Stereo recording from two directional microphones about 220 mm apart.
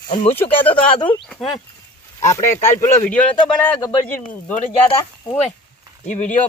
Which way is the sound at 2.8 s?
5° left (ahead or behind).